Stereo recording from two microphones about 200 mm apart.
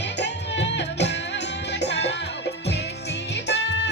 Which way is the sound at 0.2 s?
60° left (ahead or behind).